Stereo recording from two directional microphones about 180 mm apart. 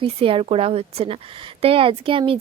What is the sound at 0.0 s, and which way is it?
A woman's voice, 30° right (ahead or behind).